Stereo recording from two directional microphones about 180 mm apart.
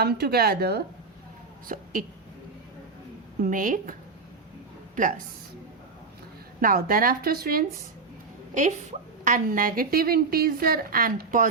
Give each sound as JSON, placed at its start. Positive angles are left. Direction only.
{"t": 0.0, "sound": "a woman's voice", "side_deg": -60}
{"t": 1.6, "sound": "a woman's voice", "side_deg": -50}
{"t": 3.4, "sound": "a woman's voice", "side_deg": -50}
{"t": 6.6, "sound": "a woman's voice", "side_deg": -50}
{"t": 8.5, "sound": "a woman's voice", "side_deg": -45}